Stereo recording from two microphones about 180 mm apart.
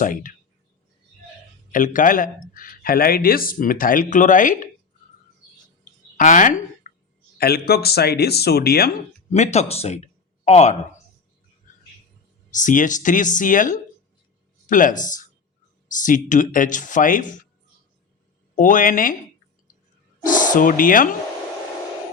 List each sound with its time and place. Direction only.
0.0 s speech: 45° left (ahead or behind)
1.7 s speech: 45° left (ahead or behind)
6.1 s a woman's voice: 45° left (ahead or behind)
7.3 s speech: 60° left (ahead or behind)
9.3 s speech: 40° left (ahead or behind)
12.5 s speech: 45° left (ahead or behind)
18.5 s speech: 50° left (ahead or behind)
20.2 s speech: 45° left (ahead or behind)